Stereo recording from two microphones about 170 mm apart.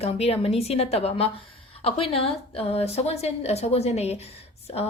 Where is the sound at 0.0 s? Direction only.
35° left (ahead or behind).